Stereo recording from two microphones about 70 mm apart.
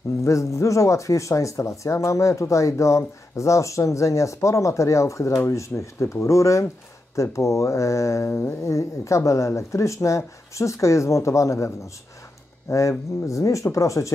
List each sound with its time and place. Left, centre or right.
0.2 s speech: left
8.3 s speech: left